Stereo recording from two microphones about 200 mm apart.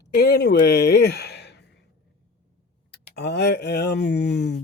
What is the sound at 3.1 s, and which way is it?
Speech, 55° left (ahead or behind).